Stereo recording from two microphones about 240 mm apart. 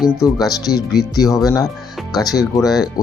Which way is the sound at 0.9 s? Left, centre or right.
Centre.